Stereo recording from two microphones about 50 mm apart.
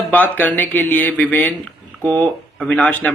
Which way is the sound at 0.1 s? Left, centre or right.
Left.